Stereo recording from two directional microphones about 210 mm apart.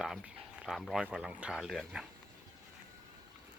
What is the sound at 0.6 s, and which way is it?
Speech, centre (ahead or behind).